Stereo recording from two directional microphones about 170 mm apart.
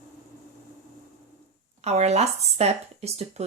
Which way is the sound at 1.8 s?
40° right (ahead or behind).